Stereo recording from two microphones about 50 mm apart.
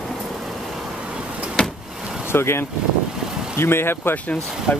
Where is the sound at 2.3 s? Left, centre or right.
Left.